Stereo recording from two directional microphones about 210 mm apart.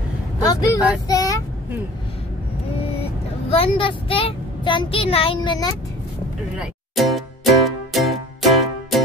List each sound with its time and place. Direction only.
0.4 s speech: 15° left (ahead or behind)
1.0 s child singing: 15° left (ahead or behind)
3.4 s speech: 25° left (ahead or behind)
6.6 s music: centre (ahead or behind)